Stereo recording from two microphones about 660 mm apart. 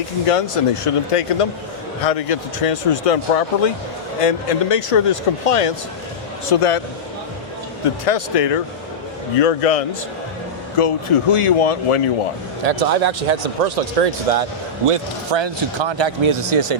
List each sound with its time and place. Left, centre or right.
0.3 s speech: left
8.0 s speech: left
12.6 s speech: right
14.8 s speech: right